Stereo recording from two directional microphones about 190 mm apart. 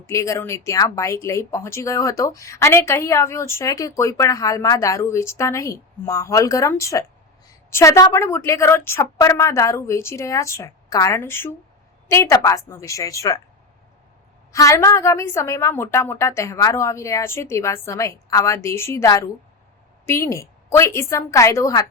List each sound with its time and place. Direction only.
0.0 s speech: 15° left (ahead or behind)
14.5 s speech: 15° left (ahead or behind)